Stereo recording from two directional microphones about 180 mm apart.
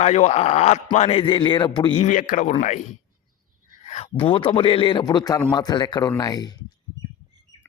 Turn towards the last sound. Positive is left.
turn(degrees=20)  # may be behind; listen again after turning